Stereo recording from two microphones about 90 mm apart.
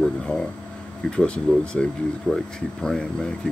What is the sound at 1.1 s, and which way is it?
Speech, 10° left (ahead or behind).